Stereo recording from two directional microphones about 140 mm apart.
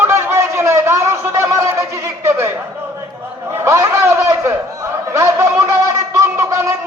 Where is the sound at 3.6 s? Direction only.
20° right (ahead or behind).